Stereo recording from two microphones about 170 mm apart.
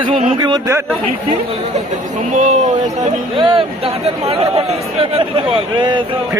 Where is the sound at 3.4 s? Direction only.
30° right (ahead or behind).